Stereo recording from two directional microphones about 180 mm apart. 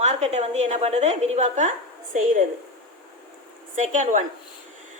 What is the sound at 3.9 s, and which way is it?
Speech, 45° right (ahead or behind).